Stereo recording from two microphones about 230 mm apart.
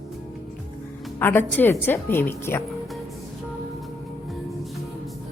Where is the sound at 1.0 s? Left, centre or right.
Centre.